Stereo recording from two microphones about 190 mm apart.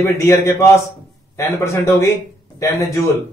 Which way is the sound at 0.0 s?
15° left (ahead or behind).